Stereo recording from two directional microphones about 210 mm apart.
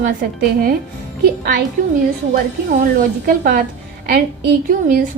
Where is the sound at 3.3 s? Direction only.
45° right (ahead or behind).